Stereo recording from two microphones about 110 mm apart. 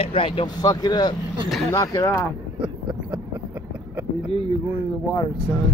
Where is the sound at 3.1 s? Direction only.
25° right (ahead or behind).